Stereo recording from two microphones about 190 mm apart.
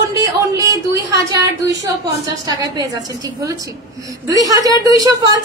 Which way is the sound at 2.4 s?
20° right (ahead or behind).